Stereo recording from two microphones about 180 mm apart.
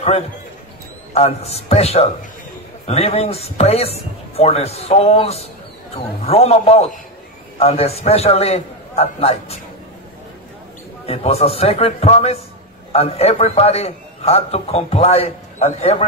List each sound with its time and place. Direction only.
1.1 s a man's voice: 35° left (ahead or behind)
11.1 s a man's voice: 35° left (ahead or behind)